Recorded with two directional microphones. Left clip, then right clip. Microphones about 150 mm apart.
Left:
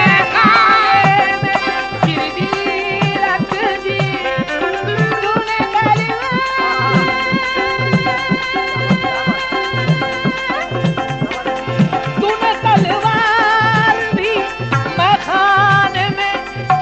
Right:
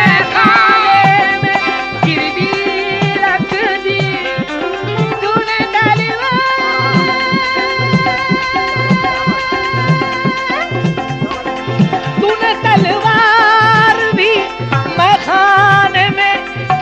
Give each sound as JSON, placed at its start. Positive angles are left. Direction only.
{"t": 0.0, "sound": "music", "side_deg": 25}
{"t": 3.2, "sound": "music", "side_deg": -50}
{"t": 5.8, "sound": "music", "side_deg": -20}
{"t": 12.2, "sound": "music", "side_deg": -25}